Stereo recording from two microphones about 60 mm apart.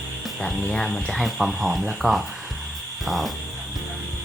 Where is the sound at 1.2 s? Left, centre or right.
Centre.